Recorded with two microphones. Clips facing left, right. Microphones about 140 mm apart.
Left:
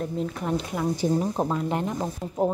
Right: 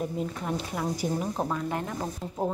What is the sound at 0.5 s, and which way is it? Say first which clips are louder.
Speech: left 6 dB; 20° left (ahead or behind).